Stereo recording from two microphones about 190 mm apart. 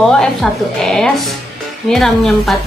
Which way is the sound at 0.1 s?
Centre (ahead or behind).